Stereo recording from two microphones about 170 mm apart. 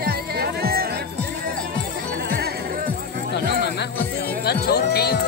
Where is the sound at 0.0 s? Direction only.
65° right (ahead or behind).